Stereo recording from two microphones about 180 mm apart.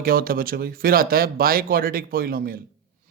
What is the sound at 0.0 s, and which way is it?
Speech, 55° right (ahead or behind).